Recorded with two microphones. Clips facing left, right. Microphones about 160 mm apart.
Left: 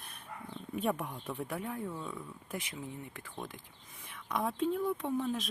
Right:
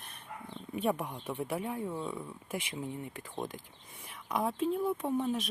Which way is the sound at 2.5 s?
10° right (ahead or behind).